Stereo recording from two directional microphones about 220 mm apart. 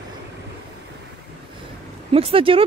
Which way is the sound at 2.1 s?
25° right (ahead or behind).